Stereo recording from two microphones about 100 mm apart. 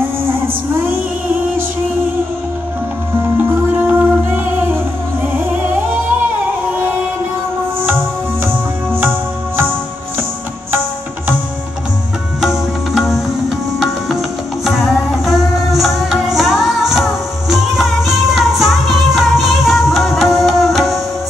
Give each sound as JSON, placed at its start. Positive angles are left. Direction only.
{"t": 3.3, "sound": "music", "side_deg": -20}
{"t": 12.4, "sound": "music", "side_deg": 0}
{"t": 14.6, "sound": "music", "side_deg": 0}